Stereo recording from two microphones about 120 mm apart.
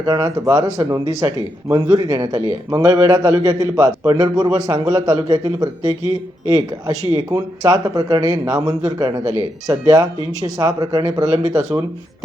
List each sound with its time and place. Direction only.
0.0 s a man's voice: 30° right (ahead or behind)
6.0 s speech: 35° left (ahead or behind)
6.5 s a man's voice: 30° right (ahead or behind)